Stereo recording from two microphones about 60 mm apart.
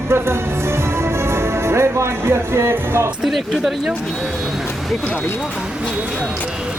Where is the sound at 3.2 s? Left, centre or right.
Centre.